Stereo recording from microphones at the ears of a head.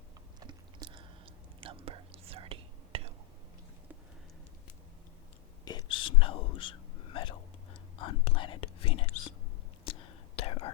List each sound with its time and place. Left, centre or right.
0.3 s whispering: right
5.6 s whispering: left